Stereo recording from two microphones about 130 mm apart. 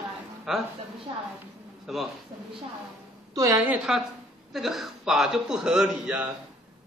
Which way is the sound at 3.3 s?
20° right (ahead or behind).